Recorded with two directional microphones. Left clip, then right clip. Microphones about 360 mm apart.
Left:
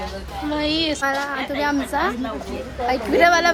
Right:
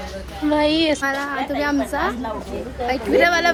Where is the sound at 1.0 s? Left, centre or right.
Centre.